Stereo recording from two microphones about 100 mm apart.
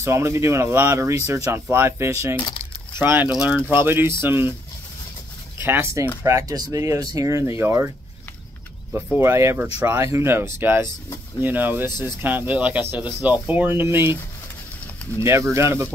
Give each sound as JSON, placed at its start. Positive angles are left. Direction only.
{"t": 0.0, "sound": "speech", "side_deg": -30}
{"t": 2.6, "sound": "crumpling", "side_deg": -25}
{"t": 3.3, "sound": "speech", "side_deg": -5}
{"t": 3.8, "sound": "speech", "side_deg": -20}
{"t": 5.6, "sound": "speech", "side_deg": -25}
{"t": 8.9, "sound": "speech", "side_deg": -25}
{"t": 15.1, "sound": "speech", "side_deg": -30}